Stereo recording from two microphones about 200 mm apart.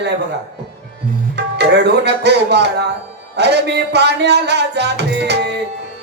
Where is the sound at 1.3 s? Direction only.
55° right (ahead or behind).